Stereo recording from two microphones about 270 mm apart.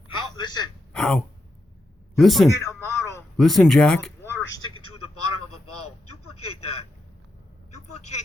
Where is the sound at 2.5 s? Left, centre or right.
Centre.